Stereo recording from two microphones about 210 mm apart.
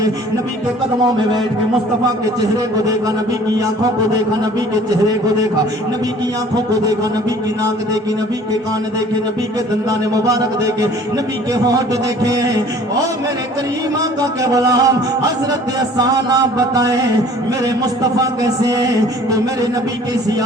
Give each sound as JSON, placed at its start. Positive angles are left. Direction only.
{"t": 9.9, "sound": "music", "side_deg": -15}
{"t": 14.0, "sound": "music", "side_deg": -15}
{"t": 16.0, "sound": "music", "side_deg": -20}
{"t": 18.2, "sound": "music", "side_deg": -15}